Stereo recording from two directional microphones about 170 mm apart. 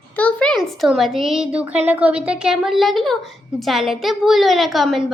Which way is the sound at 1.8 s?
10° right (ahead or behind).